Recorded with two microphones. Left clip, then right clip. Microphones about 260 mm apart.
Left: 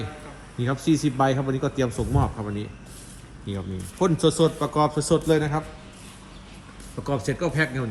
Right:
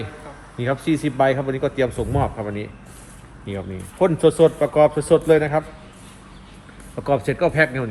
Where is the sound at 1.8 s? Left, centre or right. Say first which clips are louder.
Right 6 dB; left.